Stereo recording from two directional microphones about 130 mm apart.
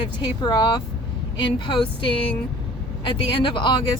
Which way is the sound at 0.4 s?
35° left (ahead or behind).